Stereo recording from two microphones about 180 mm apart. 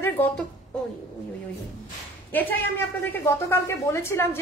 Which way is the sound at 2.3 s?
10° left (ahead or behind).